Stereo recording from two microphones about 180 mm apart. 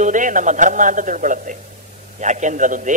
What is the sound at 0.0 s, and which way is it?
A man's voice, 45° right (ahead or behind).